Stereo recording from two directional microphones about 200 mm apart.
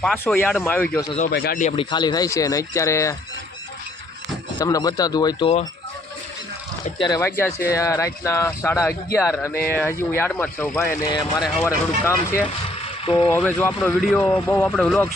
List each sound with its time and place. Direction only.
0.0 s speech: centre (ahead or behind)
0.6 s speech: 10° left (ahead or behind)
1.3 s speech: 50° left (ahead or behind)
1.6 s speech: 25° left (ahead or behind)
4.6 s speech: 20° left (ahead or behind)
7.0 s speech: 15° left (ahead or behind)
13.1 s speech: 25° left (ahead or behind)
13.3 s speech: 10° left (ahead or behind)